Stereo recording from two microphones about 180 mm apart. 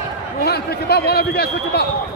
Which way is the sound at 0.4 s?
60° left (ahead or behind).